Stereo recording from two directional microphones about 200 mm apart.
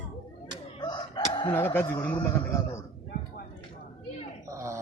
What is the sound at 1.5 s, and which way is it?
A man's voice, 10° left (ahead or behind).